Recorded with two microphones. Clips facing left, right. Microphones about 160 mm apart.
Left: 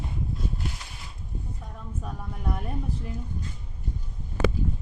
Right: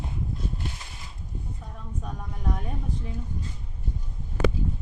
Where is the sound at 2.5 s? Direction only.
5° left (ahead or behind).